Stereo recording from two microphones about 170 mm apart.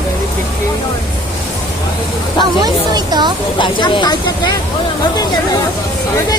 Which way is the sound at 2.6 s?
25° right (ahead or behind).